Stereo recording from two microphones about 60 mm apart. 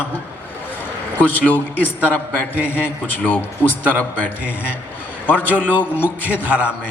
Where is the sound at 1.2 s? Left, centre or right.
Left.